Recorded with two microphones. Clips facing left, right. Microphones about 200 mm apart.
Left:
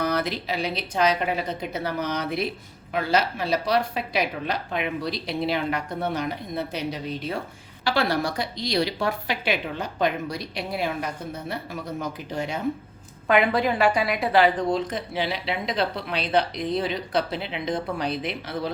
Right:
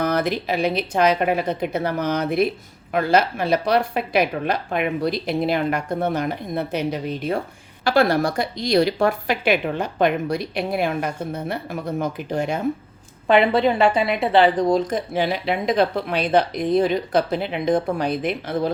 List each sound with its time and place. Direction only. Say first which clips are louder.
0.0 s a woman's voice: right 4 dB; 50° right (ahead or behind)
13.2 s a woman's voice: right 4 dB; 30° right (ahead or behind); by 18.7 s 50° right (ahead or behind)